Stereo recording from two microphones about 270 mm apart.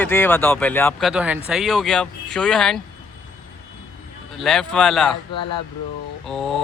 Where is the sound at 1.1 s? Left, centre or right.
Centre.